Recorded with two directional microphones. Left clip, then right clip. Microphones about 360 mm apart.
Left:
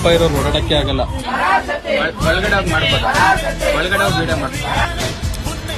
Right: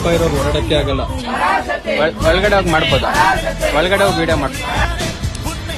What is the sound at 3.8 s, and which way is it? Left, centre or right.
Speech, right.